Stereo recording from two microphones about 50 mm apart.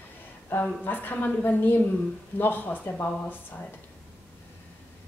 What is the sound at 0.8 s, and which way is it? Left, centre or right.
Speech, left.